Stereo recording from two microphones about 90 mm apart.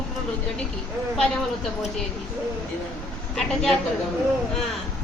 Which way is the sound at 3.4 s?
5° left (ahead or behind).